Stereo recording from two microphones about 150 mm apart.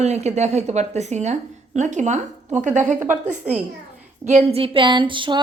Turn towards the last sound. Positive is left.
turn(degrees=-30)  # may be behind; listen again after turning